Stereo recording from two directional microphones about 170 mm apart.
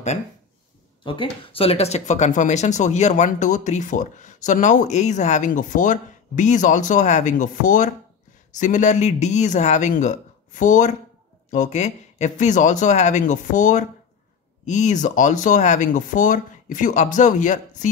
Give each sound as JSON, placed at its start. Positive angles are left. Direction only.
{"t": 1.0, "sound": "speech", "side_deg": 30}